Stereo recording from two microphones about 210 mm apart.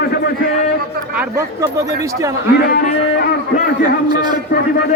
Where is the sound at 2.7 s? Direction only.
50° left (ahead or behind).